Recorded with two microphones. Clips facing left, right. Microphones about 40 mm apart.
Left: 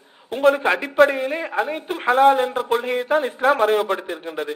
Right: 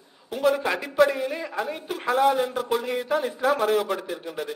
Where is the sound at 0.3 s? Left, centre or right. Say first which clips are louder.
Left 6 dB; left.